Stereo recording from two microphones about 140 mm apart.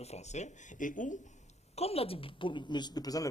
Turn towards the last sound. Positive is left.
turn(degrees=25)  # may be behind; listen again after turning